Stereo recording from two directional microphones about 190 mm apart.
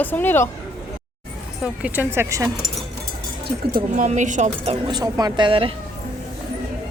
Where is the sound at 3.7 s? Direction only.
35° right (ahead or behind).